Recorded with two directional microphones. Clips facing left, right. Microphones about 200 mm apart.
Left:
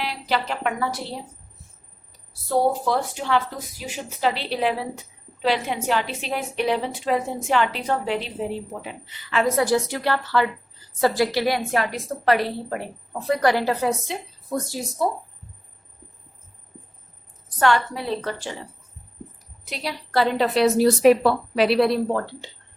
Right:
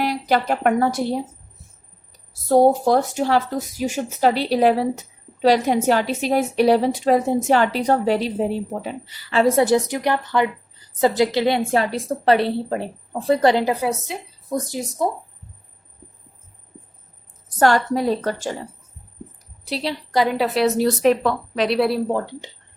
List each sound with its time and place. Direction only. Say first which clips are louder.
0.0 s a woman's voice: right 6 dB; 45° right (ahead or behind)
2.5 s a woman's voice: right 6 dB; 45° right (ahead or behind); by 15.1 s 20° right (ahead or behind)
17.6 s a woman's voice: right 4 dB; 40° right (ahead or behind)
19.6 s a woman's voice: right 5 dB; 30° right (ahead or behind)
20.1 s a woman's voice: even; 10° right (ahead or behind)
22.1 s speech: right 2 dB; 15° right (ahead or behind)